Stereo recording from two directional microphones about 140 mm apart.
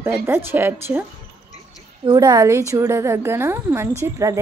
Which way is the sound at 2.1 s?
30° right (ahead or behind).